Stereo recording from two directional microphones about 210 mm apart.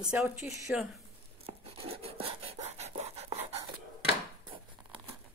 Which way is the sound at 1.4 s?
25° right (ahead or behind).